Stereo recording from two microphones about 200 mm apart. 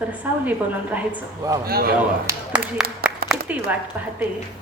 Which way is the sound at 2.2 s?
5° right (ahead or behind).